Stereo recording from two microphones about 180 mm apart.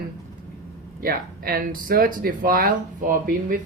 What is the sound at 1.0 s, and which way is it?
Speech, 55° right (ahead or behind).